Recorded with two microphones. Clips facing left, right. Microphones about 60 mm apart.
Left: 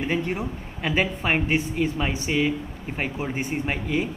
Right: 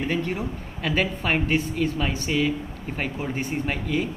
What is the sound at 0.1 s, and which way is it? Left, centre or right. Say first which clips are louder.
Speech: left 1 dB; centre.